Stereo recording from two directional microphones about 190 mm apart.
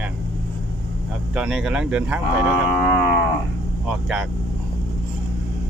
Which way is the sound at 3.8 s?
Centre (ahead or behind).